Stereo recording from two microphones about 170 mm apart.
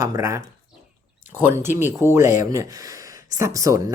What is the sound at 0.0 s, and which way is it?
Speech, 20° right (ahead or behind).